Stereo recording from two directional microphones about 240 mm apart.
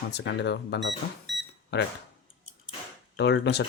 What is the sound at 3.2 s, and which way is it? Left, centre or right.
Speech, left.